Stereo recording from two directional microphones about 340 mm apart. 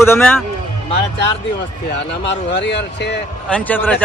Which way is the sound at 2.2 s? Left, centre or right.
Left.